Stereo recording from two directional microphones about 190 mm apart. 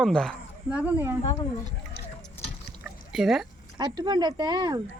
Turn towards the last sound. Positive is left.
turn(degrees=-20)  # may be behind; listen again after turning